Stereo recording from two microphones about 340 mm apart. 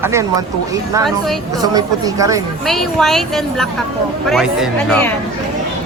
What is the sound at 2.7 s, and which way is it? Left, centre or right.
Speech, centre.